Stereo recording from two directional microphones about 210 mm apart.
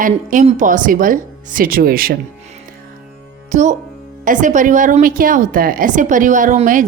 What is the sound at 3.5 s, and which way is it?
A woman's voice, 35° right (ahead or behind).